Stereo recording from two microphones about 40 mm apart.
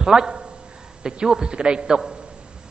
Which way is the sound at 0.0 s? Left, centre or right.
Centre.